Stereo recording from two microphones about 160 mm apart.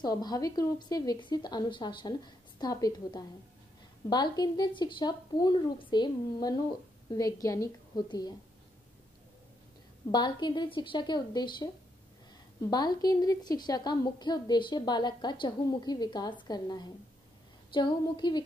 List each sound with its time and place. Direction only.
0.0 s a woman's voice: 25° left (ahead or behind)
10.1 s a woman's voice: 25° left (ahead or behind)